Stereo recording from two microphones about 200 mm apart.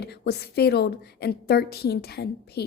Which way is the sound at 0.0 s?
55° left (ahead or behind).